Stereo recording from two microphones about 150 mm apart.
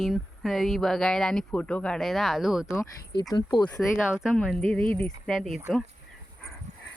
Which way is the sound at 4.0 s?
5° right (ahead or behind).